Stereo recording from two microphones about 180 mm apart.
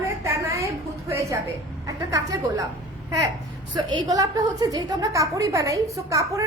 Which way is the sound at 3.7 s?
20° right (ahead or behind).